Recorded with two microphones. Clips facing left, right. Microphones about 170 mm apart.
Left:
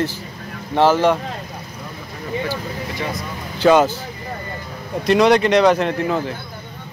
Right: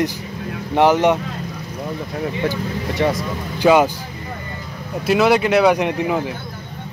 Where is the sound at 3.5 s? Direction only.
10° right (ahead or behind).